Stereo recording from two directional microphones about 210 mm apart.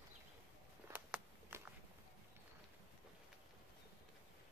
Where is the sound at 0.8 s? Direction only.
10° right (ahead or behind).